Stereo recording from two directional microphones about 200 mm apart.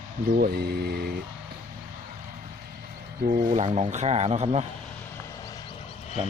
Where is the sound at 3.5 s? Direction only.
30° right (ahead or behind).